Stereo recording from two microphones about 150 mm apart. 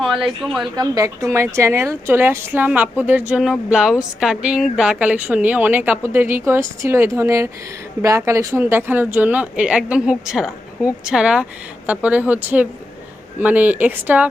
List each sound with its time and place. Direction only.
0.0 s speech: centre (ahead or behind)
0.8 s a woman's voice: 20° right (ahead or behind)